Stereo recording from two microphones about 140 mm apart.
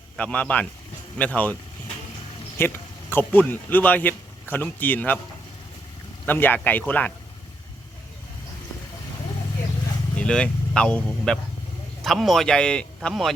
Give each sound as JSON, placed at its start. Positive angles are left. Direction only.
{"t": 0.2, "sound": "speech", "side_deg": 10}
{"t": 2.6, "sound": "speech", "side_deg": 15}
{"t": 6.2, "sound": "speech", "side_deg": 15}
{"t": 10.2, "sound": "speech", "side_deg": 5}